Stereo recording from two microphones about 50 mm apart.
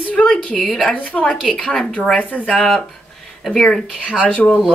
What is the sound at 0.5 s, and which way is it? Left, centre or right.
Speech, centre.